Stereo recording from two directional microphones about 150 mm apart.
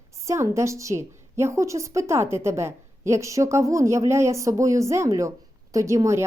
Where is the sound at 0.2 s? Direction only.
20° right (ahead or behind).